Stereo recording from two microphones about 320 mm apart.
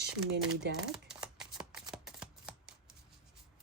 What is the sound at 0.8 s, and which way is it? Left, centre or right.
Shuffling cards, centre.